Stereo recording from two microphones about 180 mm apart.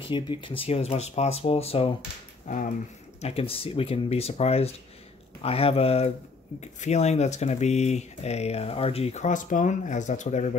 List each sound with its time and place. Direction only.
0.1 s speech: 25° left (ahead or behind)
2.4 s speech: 45° left (ahead or behind)
3.2 s speech: 35° left (ahead or behind)